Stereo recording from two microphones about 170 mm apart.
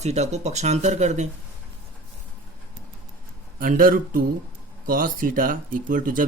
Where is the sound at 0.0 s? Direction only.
40° right (ahead or behind).